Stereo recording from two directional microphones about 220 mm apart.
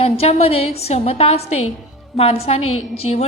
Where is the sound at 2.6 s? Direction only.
70° left (ahead or behind).